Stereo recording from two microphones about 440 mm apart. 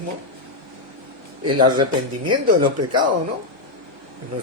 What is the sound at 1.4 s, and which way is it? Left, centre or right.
Speech, centre.